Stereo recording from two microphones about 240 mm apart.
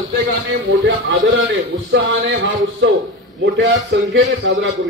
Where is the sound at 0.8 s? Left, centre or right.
Right.